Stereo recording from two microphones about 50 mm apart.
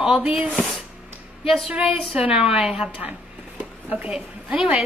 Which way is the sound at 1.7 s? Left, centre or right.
Right.